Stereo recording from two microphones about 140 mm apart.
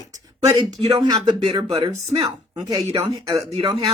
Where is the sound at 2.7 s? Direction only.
25° right (ahead or behind).